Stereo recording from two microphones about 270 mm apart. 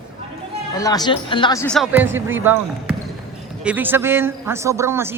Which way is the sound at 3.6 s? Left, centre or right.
Centre.